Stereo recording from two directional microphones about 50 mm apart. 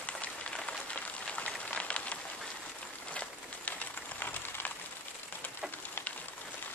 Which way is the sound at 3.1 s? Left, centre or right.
Left.